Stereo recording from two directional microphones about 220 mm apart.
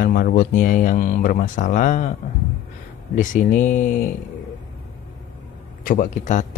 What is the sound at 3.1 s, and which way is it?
Speech, 35° left (ahead or behind).